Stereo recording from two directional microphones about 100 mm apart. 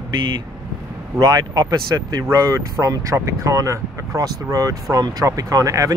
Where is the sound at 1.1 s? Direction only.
35° right (ahead or behind).